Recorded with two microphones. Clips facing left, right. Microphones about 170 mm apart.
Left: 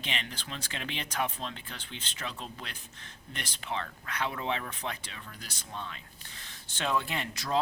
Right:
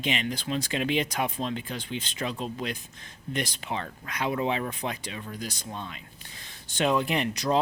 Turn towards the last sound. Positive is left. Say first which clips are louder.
# right 7 dB
turn(degrees=-15)  # may be behind; listen again after turning